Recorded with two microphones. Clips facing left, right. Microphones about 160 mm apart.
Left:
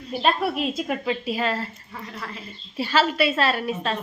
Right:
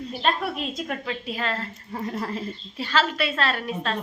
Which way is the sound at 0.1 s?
10° left (ahead or behind).